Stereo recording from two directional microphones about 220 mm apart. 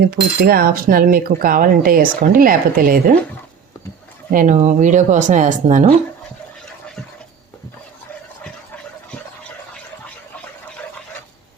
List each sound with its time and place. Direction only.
0.0 s speech: 45° right (ahead or behind)
4.3 s speech: 35° right (ahead or behind)